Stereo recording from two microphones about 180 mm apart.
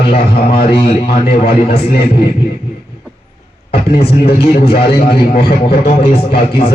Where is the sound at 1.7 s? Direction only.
60° left (ahead or behind).